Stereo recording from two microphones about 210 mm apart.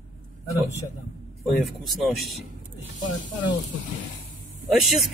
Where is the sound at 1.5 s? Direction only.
Centre (ahead or behind).